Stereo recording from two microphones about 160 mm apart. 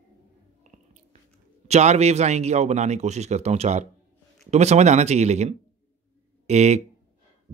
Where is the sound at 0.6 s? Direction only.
50° right (ahead or behind).